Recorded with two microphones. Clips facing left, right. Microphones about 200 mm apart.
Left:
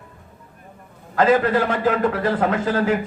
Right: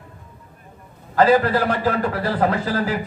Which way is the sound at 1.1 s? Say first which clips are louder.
Right 1 dB; 35° right (ahead or behind).